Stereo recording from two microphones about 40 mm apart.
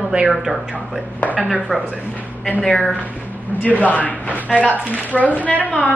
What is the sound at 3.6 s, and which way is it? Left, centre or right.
Speech, left.